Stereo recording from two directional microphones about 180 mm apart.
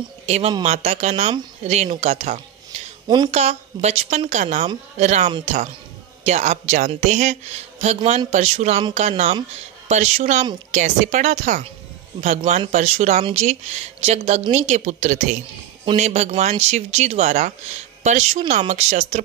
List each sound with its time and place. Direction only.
0.3 s speech: 35° right (ahead or behind)
3.1 s a woman's voice: 25° right (ahead or behind)
3.3 s speech: 35° right (ahead or behind)